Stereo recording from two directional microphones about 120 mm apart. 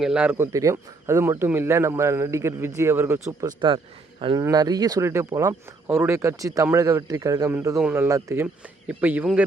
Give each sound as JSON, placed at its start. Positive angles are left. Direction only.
{"t": 0.0, "sound": "speech", "side_deg": -10}
{"t": 3.4, "sound": "speech", "side_deg": -40}
{"t": 4.4, "sound": "speech", "side_deg": -30}
{"t": 8.6, "sound": "speech", "side_deg": -10}